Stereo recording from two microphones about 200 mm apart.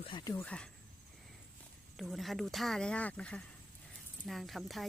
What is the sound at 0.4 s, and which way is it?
Speech, 5° left (ahead or behind).